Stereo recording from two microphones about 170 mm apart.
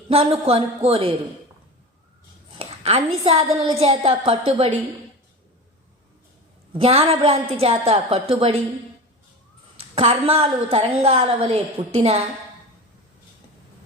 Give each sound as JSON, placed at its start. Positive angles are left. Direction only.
{"t": 0.1, "sound": "a woman's voice", "side_deg": -35}
{"t": 2.6, "sound": "a sound", "side_deg": -35}
{"t": 3.2, "sound": "a woman's voice", "side_deg": -35}
{"t": 6.7, "sound": "a woman's voice", "side_deg": -35}
{"t": 9.9, "sound": "a woman's voice", "side_deg": -35}